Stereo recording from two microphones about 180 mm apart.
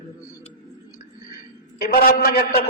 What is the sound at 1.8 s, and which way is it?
Speech, 55° left (ahead or behind).